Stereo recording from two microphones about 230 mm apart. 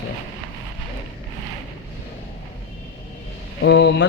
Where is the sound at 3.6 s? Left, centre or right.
Left.